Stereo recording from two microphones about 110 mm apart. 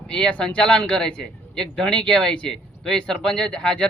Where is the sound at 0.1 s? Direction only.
10° left (ahead or behind).